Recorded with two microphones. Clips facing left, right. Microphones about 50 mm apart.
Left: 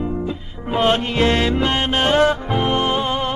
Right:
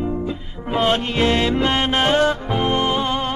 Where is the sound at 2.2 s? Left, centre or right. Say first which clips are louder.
Left 1 dB; centre.